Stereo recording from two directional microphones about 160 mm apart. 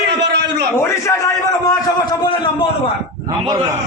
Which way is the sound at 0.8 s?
20° left (ahead or behind).